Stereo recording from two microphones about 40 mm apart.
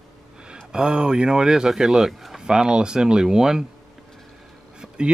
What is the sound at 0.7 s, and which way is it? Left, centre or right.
Speech, right.